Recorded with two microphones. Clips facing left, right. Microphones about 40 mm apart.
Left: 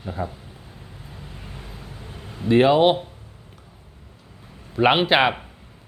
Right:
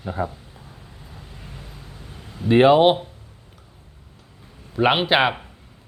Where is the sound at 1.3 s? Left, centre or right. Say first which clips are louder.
Even; centre.